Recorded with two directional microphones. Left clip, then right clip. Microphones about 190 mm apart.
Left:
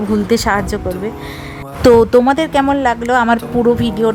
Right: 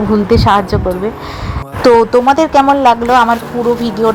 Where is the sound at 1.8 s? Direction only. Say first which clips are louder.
Right 1 dB; 25° left (ahead or behind).